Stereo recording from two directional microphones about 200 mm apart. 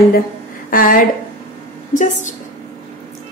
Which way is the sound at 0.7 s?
45° left (ahead or behind).